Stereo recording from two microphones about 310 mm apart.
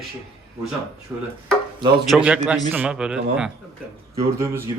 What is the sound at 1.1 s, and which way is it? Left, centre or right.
A man's voice, centre.